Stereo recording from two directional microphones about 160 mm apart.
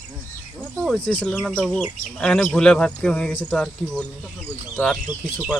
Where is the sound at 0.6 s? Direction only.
5° left (ahead or behind).